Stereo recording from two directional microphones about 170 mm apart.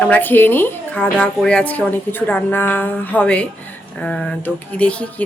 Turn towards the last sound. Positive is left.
turn(degrees=5)  # may be behind; listen again after turning